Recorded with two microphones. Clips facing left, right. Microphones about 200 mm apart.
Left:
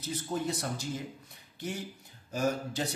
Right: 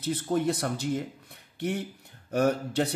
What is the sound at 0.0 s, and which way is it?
Speech, 60° right (ahead or behind).